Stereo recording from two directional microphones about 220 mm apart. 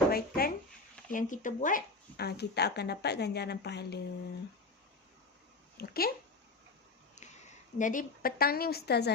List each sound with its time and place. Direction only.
0.1 s a sound: 45° left (ahead or behind)
1.1 s speech: 35° left (ahead or behind)
5.7 s speech: 45° left (ahead or behind)
7.2 s a woman's voice: 35° left (ahead or behind)